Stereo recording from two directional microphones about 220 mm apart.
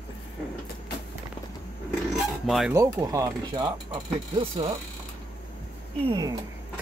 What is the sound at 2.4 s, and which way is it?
Speech, centre (ahead or behind).